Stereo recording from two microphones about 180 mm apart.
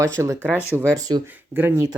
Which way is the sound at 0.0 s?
15° right (ahead or behind).